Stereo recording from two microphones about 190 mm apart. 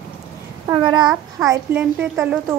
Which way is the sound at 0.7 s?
25° right (ahead or behind).